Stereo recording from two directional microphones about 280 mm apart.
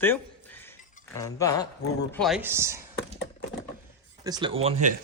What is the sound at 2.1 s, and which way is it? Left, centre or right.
Speech, centre.